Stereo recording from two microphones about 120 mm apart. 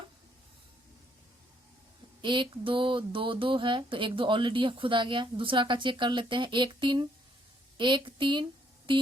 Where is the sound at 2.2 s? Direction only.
40° right (ahead or behind).